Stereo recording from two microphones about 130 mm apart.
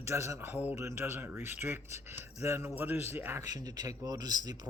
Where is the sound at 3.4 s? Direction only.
30° right (ahead or behind).